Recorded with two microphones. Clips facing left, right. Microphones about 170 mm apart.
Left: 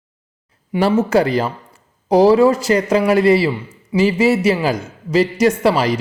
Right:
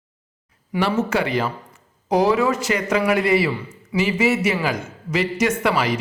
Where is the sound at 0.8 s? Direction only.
35° left (ahead or behind).